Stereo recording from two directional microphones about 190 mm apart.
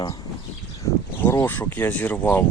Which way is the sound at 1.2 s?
10° left (ahead or behind).